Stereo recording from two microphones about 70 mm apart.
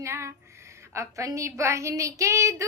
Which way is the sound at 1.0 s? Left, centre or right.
Right.